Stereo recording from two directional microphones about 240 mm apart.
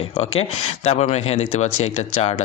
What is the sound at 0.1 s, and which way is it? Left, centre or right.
Speech, left.